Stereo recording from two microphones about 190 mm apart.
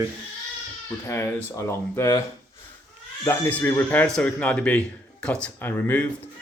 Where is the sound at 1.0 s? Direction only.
15° left (ahead or behind).